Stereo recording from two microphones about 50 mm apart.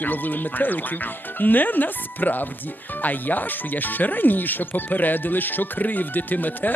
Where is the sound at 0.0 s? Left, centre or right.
Left.